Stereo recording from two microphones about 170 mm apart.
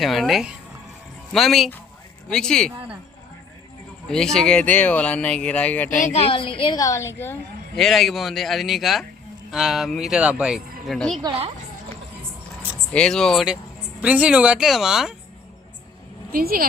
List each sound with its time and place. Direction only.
0.0 s speech: centre (ahead or behind)
4.1 s speech: 5° left (ahead or behind)
6.1 s a woman's voice: 30° left (ahead or behind); by 7.3 s 15° left (ahead or behind)
7.8 s speech: centre (ahead or behind)
12.9 s speech: 5° left (ahead or behind)
16.3 s a woman's voice: 60° right (ahead or behind)